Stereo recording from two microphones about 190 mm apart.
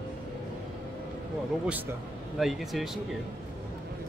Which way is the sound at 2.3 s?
Centre (ahead or behind).